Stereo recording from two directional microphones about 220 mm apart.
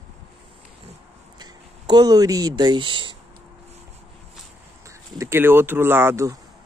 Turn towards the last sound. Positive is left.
turn(degrees=-15)  # may be behind; listen again after turning